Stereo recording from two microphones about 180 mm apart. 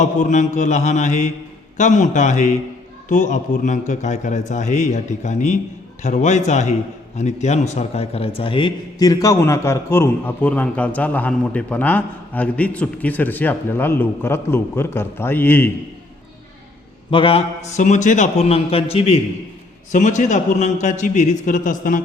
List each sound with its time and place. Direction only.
0.0 s a man's voice: 40° left (ahead or behind); by 15.7 s 10° left (ahead or behind)
17.1 s a man's voice: 30° left (ahead or behind); by 22.0 s 45° left (ahead or behind)